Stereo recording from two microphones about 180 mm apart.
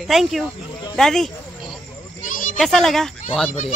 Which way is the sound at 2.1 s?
45° left (ahead or behind).